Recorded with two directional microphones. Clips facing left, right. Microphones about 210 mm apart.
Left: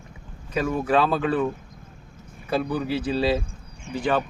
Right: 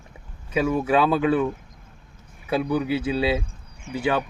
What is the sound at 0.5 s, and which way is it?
Speech, 5° right (ahead or behind).